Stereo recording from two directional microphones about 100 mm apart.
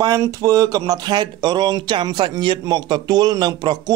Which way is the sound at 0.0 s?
35° right (ahead or behind).